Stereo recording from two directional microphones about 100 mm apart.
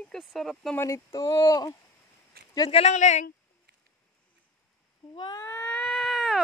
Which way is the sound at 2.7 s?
90° left.